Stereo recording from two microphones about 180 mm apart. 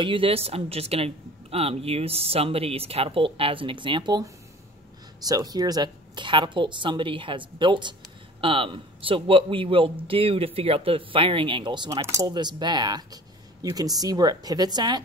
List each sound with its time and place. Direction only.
0.0 s a woman's voice: 30° right (ahead or behind)